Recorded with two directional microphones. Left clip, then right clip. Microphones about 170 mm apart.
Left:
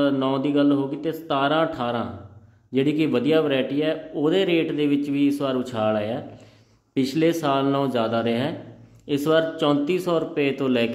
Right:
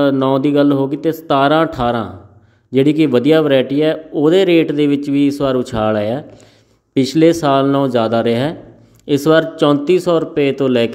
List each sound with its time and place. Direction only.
0.0 s speech: 40° right (ahead or behind)